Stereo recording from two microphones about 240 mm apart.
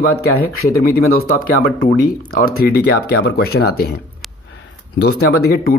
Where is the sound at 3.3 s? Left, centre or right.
Left.